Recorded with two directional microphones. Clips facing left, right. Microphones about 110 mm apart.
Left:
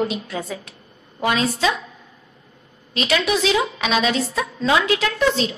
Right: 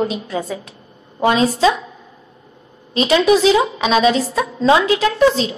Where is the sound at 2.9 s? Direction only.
30° right (ahead or behind).